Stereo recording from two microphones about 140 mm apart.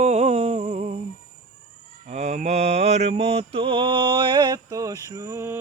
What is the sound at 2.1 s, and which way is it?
Mantra, 50° right (ahead or behind).